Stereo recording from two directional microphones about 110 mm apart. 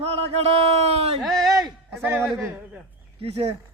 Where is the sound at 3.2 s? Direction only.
65° right (ahead or behind).